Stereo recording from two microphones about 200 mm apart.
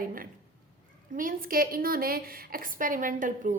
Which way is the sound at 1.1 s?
45° right (ahead or behind).